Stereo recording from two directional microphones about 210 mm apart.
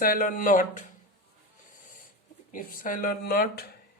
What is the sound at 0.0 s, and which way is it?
Speech, 40° left (ahead or behind).